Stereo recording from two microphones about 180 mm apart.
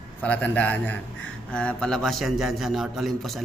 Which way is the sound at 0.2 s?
10° left (ahead or behind).